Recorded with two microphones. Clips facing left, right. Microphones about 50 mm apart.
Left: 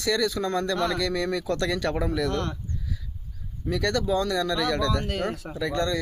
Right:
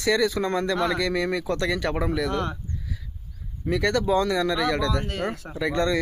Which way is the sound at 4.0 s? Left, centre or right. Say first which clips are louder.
Right 3 dB; right.